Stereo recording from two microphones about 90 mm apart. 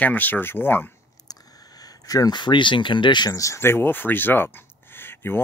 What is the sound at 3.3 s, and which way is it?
Speech, 30° left (ahead or behind).